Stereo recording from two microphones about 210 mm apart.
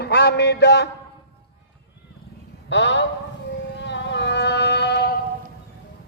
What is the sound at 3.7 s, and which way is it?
Music, 55° left (ahead or behind).